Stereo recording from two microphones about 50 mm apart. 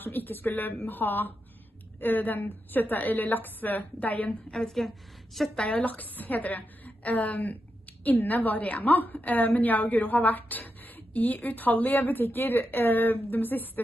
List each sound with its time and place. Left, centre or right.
0.0 s a woman's voice: left
4.7 s a woman's voice: centre
5.6 s a woman's voice: left